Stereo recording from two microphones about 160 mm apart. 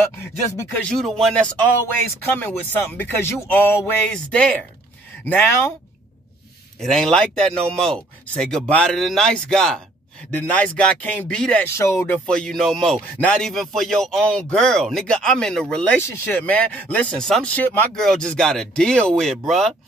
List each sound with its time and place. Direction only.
0.5 s speech: 20° left (ahead or behind)
0.8 s speech: centre (ahead or behind)
6.8 s speech: 5° left (ahead or behind)
11.7 s speech: 15° left (ahead or behind); by 19.7 s centre (ahead or behind)